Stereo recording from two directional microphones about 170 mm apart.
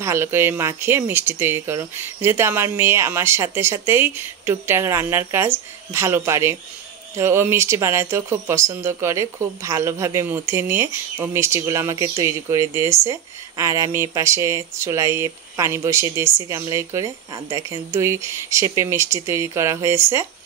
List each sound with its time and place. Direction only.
0.0 s speech: 15° right (ahead or behind)